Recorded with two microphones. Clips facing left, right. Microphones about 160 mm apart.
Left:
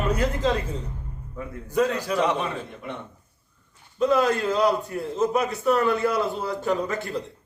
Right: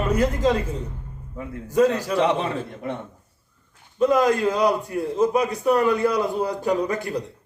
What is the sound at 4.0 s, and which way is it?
A man's voice, 10° right (ahead or behind).